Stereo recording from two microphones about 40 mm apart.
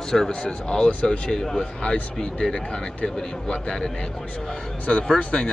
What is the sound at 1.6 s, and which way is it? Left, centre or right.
Speech, left.